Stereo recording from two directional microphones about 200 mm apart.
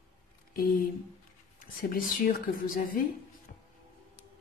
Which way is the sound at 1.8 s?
45° left (ahead or behind).